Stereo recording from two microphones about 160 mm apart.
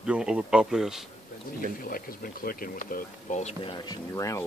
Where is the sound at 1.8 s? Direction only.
65° left (ahead or behind); by 3.9 s 35° left (ahead or behind).